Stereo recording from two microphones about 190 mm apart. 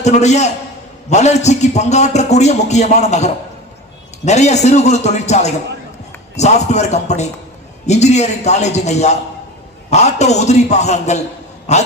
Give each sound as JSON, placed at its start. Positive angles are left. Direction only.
{"t": 0.0, "sound": "a man's voice", "side_deg": 35}